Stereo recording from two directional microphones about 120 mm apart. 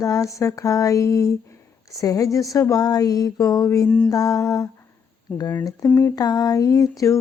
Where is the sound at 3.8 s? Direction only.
10° left (ahead or behind).